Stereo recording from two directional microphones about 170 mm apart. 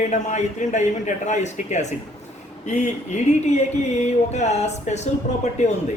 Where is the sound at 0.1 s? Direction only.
45° left (ahead or behind).